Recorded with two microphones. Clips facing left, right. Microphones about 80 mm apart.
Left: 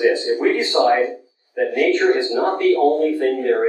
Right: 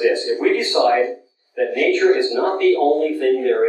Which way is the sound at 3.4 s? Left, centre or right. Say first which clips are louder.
Right 1 dB; left.